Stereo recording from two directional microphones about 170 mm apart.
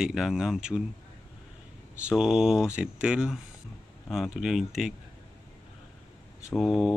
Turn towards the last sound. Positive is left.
turn(degrees=0)  # may be behind; listen again after turning